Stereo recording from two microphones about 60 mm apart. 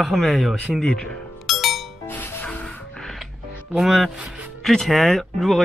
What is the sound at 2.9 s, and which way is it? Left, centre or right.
Music, centre.